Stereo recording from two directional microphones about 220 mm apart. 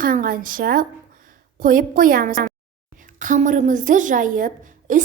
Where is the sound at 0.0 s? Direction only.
40° right (ahead or behind).